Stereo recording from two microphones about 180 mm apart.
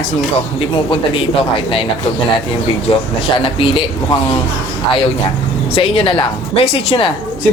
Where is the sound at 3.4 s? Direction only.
30° left (ahead or behind).